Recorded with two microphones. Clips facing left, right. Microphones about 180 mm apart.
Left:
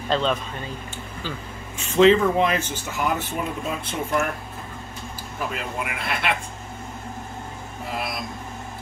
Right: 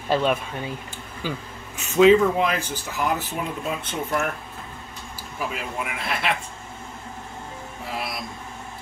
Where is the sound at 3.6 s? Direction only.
Centre (ahead or behind).